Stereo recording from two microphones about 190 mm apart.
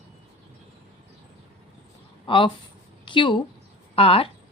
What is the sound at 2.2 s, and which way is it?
A woman's voice, 25° left (ahead or behind).